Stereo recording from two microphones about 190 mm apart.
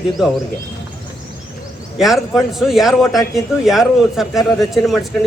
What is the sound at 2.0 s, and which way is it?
A man's voice, centre (ahead or behind).